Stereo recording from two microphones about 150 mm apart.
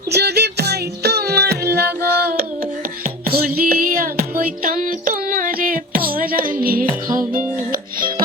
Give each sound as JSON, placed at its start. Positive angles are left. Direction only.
{"t": 0.1, "sound": "music", "side_deg": -90}
{"t": 3.2, "sound": "music", "side_deg": -85}